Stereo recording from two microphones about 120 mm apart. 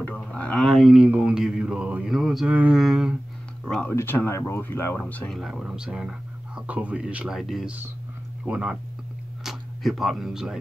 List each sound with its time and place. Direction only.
0.0 s mantra: 10° left (ahead or behind)
2.5 s mantra: 10° right (ahead or behind)
2.8 s a sound: 5° right (ahead or behind)
3.9 s speech: 20° left (ahead or behind)
5.3 s speech: 5° right (ahead or behind)